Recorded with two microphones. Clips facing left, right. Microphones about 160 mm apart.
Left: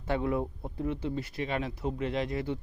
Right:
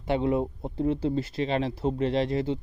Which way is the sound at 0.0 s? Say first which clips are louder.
Right 5 dB; 20° right (ahead or behind).